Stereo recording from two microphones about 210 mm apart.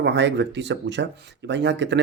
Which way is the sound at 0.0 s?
55° right (ahead or behind).